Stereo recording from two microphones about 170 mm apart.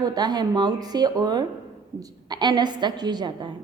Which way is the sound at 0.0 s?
25° right (ahead or behind).